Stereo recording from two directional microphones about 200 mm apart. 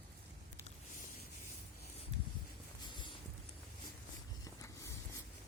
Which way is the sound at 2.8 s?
20° left (ahead or behind).